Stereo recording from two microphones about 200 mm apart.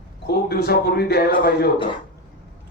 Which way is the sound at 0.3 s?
50° left (ahead or behind).